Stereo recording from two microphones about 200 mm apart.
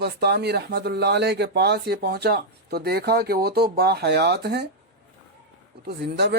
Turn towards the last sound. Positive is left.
turn(degrees=-55)  # may be behind; listen again after turning